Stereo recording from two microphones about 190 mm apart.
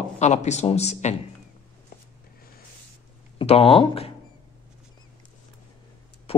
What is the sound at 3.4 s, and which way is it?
Speech, 30° left (ahead or behind).